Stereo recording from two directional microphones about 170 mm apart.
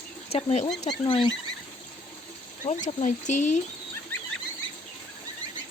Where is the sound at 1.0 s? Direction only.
30° left (ahead or behind).